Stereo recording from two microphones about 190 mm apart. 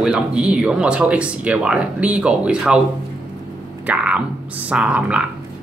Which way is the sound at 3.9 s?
5° right (ahead or behind).